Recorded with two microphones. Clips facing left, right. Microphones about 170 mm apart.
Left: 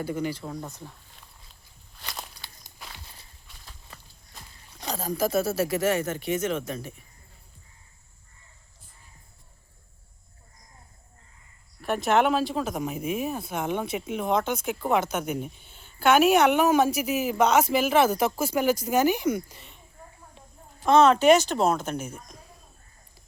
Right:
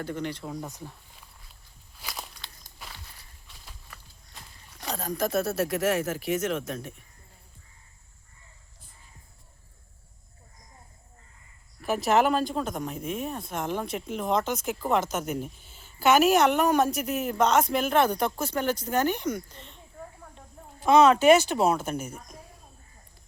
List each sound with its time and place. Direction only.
0.0 s speech: 5° left (ahead or behind)
0.6 s speech: 15° right (ahead or behind)
2.0 s walk: centre (ahead or behind)
3.9 s walk: 25° left (ahead or behind)
4.9 s speech: 5° left (ahead or behind)
11.8 s speech: centre (ahead or behind)
20.8 s speech: 5° right (ahead or behind)